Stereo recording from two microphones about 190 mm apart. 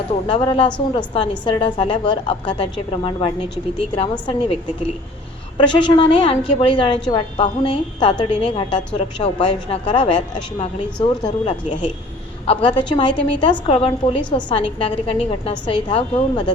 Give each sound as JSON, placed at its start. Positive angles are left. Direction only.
{"t": 0.3, "sound": "a woman's voice", "side_deg": 30}
{"t": 5.5, "sound": "a woman's voice", "side_deg": 25}